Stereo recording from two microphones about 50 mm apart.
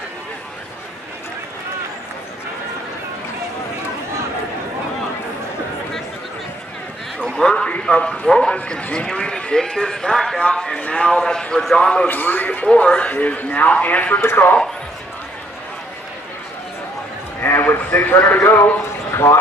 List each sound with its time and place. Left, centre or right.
7.3 s a sound: centre
7.8 s a man's voice: centre
10.8 s a man's voice: left
11.1 s speech: centre
12.1 s a man's voice: left
12.7 s a man's voice: left
14.2 s speech: left
17.4 s a man's voice: left